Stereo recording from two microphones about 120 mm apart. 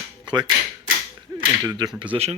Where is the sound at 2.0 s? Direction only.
45° right (ahead or behind).